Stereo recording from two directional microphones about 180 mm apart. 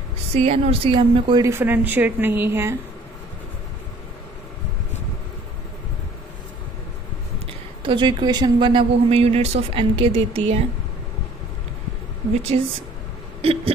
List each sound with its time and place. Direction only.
0.3 s speech: 35° right (ahead or behind)
1.5 s a woman's voice: 10° right (ahead or behind)
7.8 s speech: 25° right (ahead or behind)
13.4 s hiccup: 30° right (ahead or behind)